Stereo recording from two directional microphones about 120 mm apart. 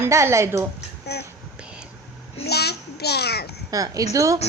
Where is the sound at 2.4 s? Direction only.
60° left (ahead or behind).